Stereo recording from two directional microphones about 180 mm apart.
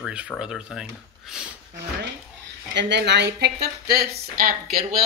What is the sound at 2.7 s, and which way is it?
Speech, 70° right (ahead or behind).